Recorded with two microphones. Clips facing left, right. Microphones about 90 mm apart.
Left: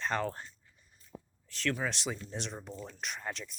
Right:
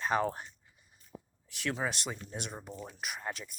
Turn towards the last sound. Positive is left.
turn(degrees=-5)  # may be behind; listen again after turning